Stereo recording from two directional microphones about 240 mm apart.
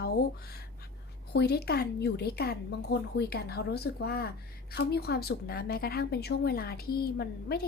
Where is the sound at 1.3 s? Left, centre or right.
Left.